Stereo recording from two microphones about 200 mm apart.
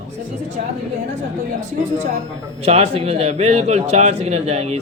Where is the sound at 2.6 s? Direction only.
30° right (ahead or behind).